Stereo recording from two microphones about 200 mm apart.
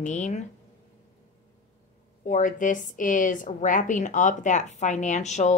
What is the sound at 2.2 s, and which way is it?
A woman's voice, 40° left (ahead or behind).